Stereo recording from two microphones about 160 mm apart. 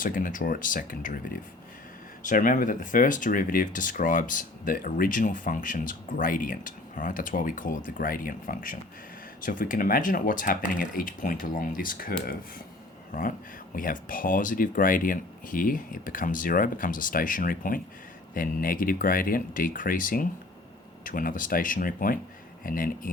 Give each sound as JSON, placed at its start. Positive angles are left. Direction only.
{"t": 0.0, "sound": "speech", "side_deg": 60}